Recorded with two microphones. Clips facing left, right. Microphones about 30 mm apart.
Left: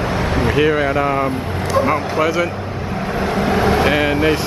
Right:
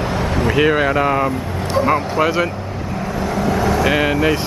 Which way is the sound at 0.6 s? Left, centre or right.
Centre.